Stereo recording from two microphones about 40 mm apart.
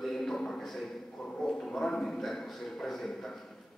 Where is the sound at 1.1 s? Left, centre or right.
Left.